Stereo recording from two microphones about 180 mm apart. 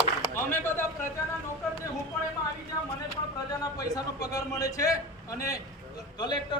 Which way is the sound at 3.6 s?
20° left (ahead or behind).